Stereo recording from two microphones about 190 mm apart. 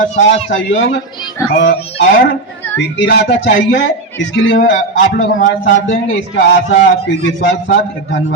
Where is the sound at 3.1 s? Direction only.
60° left (ahead or behind).